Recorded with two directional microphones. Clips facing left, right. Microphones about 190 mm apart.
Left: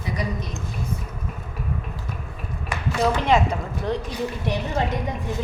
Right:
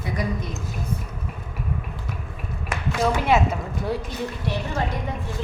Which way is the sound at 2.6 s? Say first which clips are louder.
Left 1 dB; 5° right (ahead or behind).